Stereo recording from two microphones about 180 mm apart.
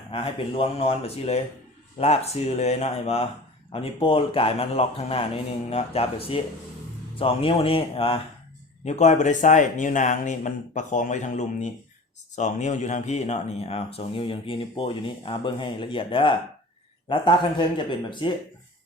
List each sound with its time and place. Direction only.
0.1 s speech: 30° left (ahead or behind)